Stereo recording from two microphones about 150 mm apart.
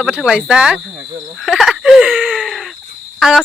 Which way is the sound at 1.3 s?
Centre (ahead or behind).